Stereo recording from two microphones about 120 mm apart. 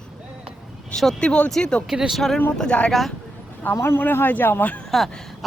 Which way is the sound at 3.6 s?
20° left (ahead or behind).